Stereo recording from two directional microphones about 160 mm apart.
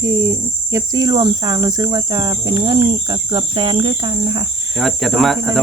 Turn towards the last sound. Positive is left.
turn(degrees=0)  # may be behind; listen again after turning